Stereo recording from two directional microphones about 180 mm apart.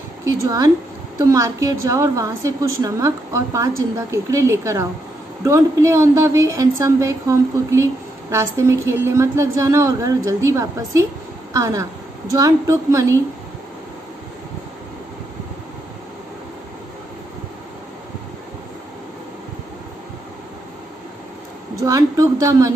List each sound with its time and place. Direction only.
0.2 s a woman's voice: 20° right (ahead or behind)
21.7 s speech: 20° right (ahead or behind)